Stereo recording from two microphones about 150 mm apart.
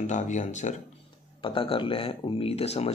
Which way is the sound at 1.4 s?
35° left (ahead or behind).